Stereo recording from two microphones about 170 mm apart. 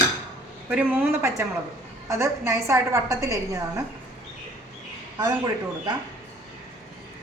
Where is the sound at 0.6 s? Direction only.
10° right (ahead or behind).